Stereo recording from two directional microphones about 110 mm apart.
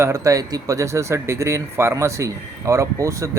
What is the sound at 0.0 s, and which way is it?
Speech, 30° right (ahead or behind).